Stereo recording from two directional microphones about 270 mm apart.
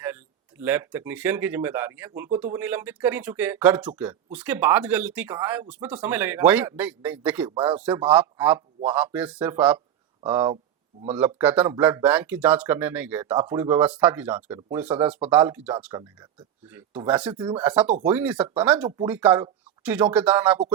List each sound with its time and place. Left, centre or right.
0.6 s speech: centre
17.3 s speech: centre
17.6 s speech: centre